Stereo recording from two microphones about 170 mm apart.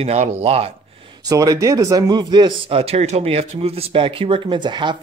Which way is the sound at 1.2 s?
20° right (ahead or behind).